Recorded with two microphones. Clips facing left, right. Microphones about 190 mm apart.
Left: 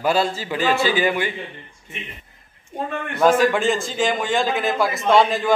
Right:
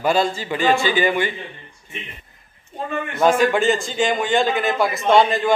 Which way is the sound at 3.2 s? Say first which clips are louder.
Even; centre (ahead or behind).